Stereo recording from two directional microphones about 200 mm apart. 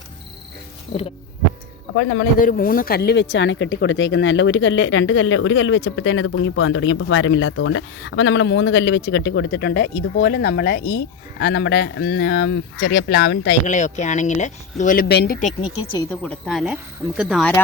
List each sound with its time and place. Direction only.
2.0 s speech: 60° left (ahead or behind)
2.4 s speech: 45° left (ahead or behind)
13.7 s speech: 40° left (ahead or behind)
15.0 s speech: 55° left (ahead or behind)
16.0 s speech: 5° left (ahead or behind)